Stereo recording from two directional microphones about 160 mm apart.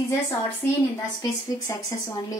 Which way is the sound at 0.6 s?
15° left (ahead or behind).